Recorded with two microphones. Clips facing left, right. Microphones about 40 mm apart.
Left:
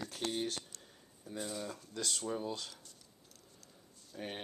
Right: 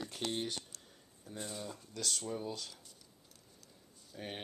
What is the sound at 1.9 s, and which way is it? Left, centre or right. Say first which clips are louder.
Speech: even; left.